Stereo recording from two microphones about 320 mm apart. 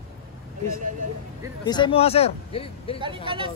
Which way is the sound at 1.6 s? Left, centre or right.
Centre.